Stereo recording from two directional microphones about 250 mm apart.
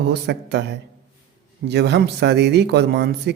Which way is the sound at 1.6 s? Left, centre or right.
Right.